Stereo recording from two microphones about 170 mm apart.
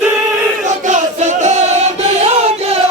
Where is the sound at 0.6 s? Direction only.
45° right (ahead or behind).